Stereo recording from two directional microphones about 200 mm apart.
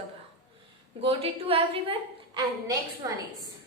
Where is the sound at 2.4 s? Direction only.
15° right (ahead or behind).